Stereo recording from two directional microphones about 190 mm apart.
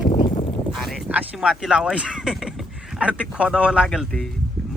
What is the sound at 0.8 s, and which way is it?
Speech, centre (ahead or behind).